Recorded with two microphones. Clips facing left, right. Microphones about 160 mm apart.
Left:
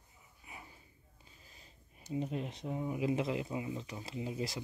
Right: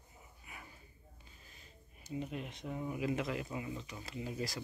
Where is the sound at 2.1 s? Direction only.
30° left (ahead or behind).